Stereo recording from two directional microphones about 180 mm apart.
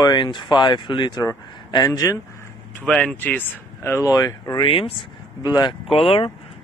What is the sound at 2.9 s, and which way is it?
Speech, 5° left (ahead or behind).